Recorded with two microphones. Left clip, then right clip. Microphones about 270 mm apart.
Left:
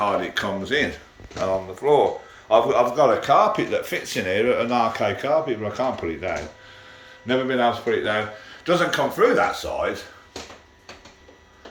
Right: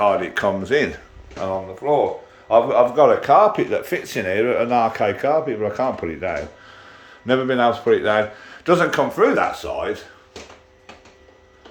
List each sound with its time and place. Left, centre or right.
0.0 s speech: centre